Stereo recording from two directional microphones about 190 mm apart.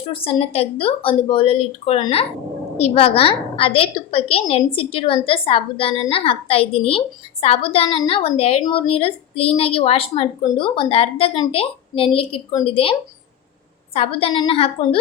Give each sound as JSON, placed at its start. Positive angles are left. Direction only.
{"t": 0.1, "sound": "a woman's voice", "side_deg": 30}